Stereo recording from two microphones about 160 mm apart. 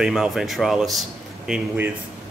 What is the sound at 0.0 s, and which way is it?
Speech, centre (ahead or behind).